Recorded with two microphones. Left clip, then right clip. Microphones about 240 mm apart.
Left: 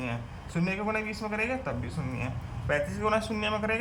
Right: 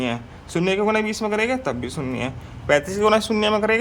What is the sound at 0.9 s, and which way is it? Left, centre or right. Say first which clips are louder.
Speech: right 10 dB; right.